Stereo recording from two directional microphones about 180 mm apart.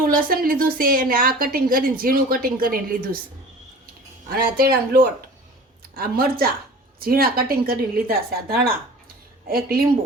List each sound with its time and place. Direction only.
0.1 s a woman's voice: 55° right (ahead or behind)
4.3 s a woman's voice: 55° right (ahead or behind)